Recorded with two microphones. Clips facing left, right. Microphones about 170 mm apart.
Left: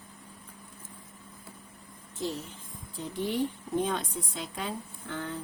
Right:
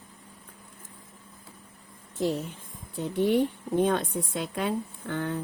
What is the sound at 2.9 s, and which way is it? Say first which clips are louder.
A woman's voice: right 7 dB; 60° right (ahead or behind).